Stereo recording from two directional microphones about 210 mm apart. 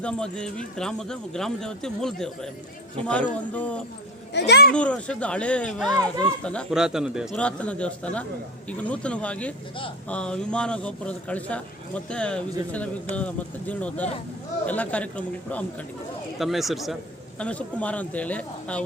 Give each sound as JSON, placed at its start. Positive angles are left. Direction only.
{"t": 0.0, "sound": "a man's voice", "side_deg": 5}
{"t": 4.4, "sound": "speech", "side_deg": 50}
{"t": 4.7, "sound": "speech", "side_deg": 5}
{"t": 5.9, "sound": "speech", "side_deg": -20}
{"t": 6.4, "sound": "a man's voice", "side_deg": 5}